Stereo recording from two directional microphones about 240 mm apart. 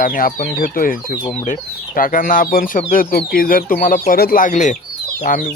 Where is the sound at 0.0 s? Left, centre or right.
Left.